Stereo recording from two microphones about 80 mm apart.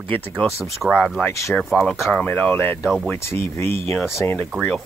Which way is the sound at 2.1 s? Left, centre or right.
Centre.